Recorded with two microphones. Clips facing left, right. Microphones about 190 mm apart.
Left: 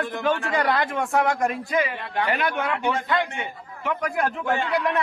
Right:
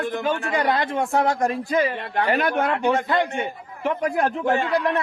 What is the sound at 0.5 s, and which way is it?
Speech, 20° right (ahead or behind).